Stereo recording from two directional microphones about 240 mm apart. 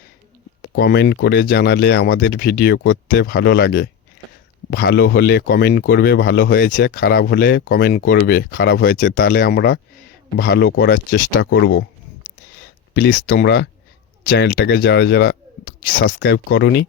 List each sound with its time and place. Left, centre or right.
0.6 s speech: left
12.9 s speech: left